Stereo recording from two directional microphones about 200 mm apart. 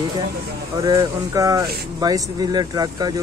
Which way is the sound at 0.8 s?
20° right (ahead or behind).